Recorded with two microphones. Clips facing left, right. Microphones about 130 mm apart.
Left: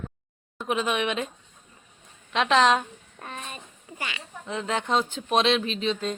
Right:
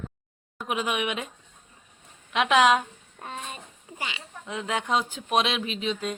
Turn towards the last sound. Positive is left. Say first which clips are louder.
# left 2 dB
turn(degrees=-10)  # may be behind; listen again after turning